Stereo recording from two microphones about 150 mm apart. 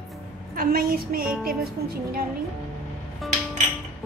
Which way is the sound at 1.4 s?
90° right.